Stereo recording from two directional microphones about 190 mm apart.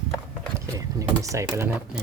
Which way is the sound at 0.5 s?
15° right (ahead or behind).